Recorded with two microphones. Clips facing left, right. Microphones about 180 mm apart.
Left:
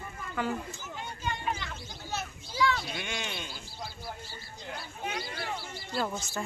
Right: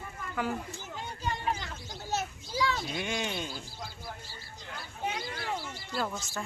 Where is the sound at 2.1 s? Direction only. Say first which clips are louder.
Right 4 dB; 40° right (ahead or behind).